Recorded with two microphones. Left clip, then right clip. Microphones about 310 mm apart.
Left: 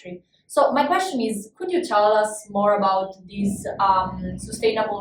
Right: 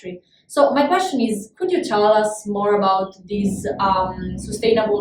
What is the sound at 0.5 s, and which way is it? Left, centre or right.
Speech, centre.